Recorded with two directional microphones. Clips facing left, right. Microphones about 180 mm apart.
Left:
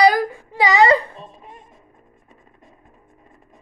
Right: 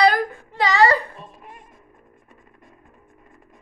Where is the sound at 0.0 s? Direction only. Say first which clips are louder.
Left 3 dB; 10° left (ahead or behind).